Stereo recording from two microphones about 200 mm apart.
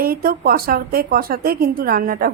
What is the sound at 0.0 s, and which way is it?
A woman's voice, 45° right (ahead or behind).